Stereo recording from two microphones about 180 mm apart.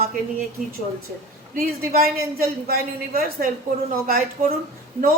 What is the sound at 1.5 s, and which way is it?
Speech, 55° right (ahead or behind).